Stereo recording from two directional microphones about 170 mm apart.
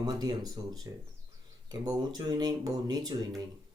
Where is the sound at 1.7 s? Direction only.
20° right (ahead or behind).